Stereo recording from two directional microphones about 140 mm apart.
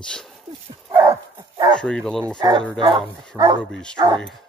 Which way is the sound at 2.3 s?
35° right (ahead or behind).